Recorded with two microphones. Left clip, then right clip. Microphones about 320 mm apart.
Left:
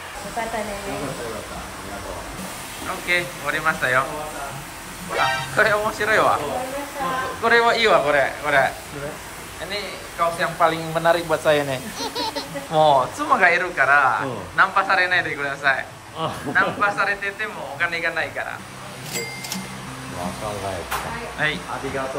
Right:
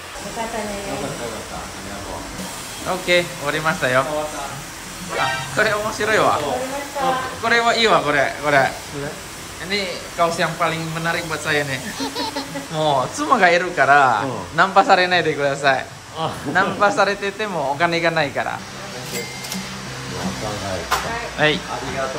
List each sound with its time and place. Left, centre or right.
3.1 s speech: centre
5.1 s speech: centre
7.4 s speech: centre
10.4 s speech: centre
21.4 s speech: centre